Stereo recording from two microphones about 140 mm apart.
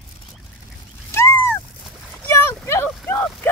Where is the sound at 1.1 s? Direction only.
20° left (ahead or behind).